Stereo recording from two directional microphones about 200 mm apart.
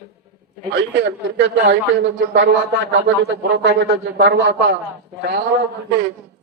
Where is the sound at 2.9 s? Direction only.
60° right (ahead or behind).